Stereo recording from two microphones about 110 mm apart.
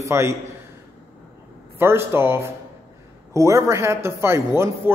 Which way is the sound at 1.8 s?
20° right (ahead or behind).